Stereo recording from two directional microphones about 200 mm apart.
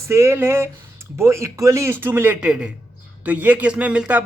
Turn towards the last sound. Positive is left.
turn(degrees=-5)  # may be behind; listen again after turning